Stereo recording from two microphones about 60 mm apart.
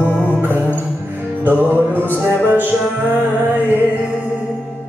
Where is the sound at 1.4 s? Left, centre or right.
Right.